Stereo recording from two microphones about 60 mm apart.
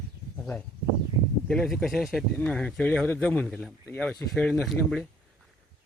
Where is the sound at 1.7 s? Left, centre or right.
Centre.